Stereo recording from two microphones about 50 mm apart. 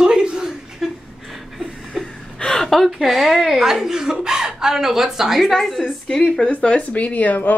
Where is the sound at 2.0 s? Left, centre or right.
Centre.